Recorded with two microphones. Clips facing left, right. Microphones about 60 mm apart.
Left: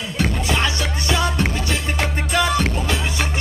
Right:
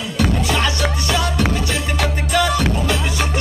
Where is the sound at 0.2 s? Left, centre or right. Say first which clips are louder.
Right 2 dB; left.